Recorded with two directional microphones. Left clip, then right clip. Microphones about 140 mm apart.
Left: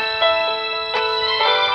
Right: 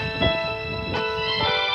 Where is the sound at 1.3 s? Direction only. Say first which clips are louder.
Left 6 dB; 40° left (ahead or behind).